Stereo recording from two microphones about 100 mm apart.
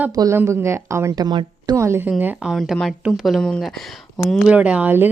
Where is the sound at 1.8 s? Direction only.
25° right (ahead or behind).